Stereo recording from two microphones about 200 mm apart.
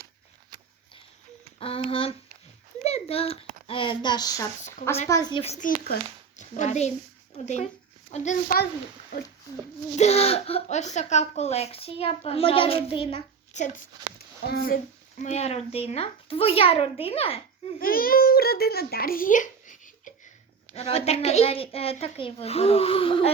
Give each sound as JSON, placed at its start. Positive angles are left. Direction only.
{"t": 1.5, "sound": "a woman's voice", "side_deg": 30}
{"t": 2.8, "sound": "a sound", "side_deg": 30}
{"t": 3.7, "sound": "a woman's voice", "side_deg": 25}
{"t": 5.4, "sound": "speech", "side_deg": 35}
{"t": 9.9, "sound": "speech", "side_deg": 35}
{"t": 14.4, "sound": "speech", "side_deg": 50}
{"t": 15.2, "sound": "a woman's voice", "side_deg": 35}
{"t": 17.7, "sound": "a child's voice", "side_deg": 45}